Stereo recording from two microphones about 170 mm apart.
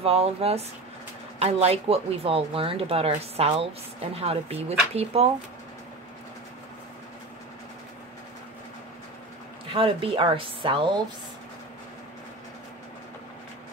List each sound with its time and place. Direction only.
0.0 s speech: 35° right (ahead or behind)
9.7 s speech: 30° right (ahead or behind)